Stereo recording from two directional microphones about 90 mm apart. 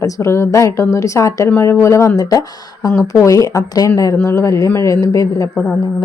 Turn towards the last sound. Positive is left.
turn(degrees=40)  # may be behind; listen again after turning